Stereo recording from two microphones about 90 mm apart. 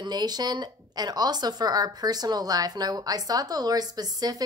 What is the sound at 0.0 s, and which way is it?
Speech, 50° right (ahead or behind).